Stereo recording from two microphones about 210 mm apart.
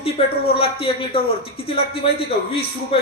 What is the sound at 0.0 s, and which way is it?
Speech, 25° left (ahead or behind).